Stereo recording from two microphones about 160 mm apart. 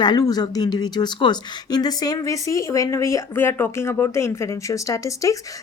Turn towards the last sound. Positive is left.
turn(degrees=20)  # may be behind; listen again after turning